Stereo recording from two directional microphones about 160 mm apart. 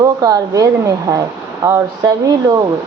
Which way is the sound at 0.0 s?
25° right (ahead or behind).